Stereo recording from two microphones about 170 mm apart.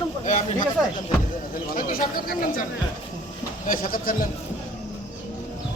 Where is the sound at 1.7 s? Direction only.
60° left (ahead or behind).